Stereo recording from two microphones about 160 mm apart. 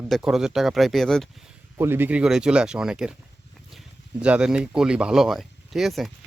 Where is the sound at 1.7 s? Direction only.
15° right (ahead or behind).